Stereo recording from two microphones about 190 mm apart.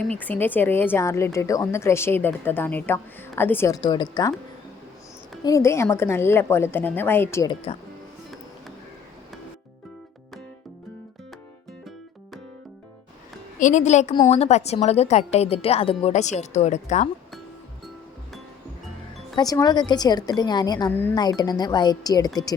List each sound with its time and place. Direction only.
0.2 s a woman's voice: 10° left (ahead or behind)
5.4 s a woman's voice: 20° left (ahead or behind)
13.6 s speech: 40° left (ahead or behind)
19.4 s a woman's voice: 20° left (ahead or behind)